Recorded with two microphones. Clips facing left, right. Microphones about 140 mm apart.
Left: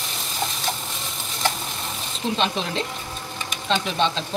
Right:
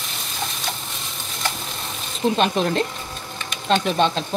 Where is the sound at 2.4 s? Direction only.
50° right (ahead or behind).